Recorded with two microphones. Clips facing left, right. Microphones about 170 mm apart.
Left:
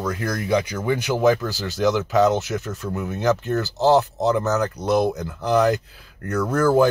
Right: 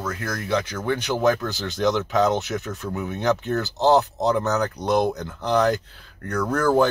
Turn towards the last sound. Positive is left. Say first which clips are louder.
# left 2 dB
turn(degrees=5)  # may be behind; listen again after turning